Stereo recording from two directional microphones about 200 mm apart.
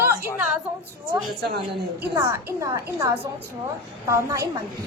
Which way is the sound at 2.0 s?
15° right (ahead or behind).